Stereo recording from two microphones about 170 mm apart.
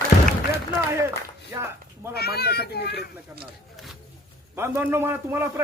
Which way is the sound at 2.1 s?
70° left (ahead or behind).